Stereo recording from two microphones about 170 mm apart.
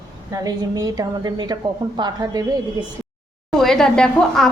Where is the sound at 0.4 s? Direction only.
20° right (ahead or behind).